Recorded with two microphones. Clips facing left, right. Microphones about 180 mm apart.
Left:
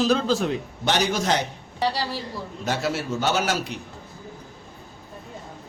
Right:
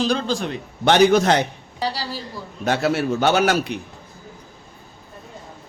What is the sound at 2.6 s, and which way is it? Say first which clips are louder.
A man's voice: right 6 dB; 60° right (ahead or behind).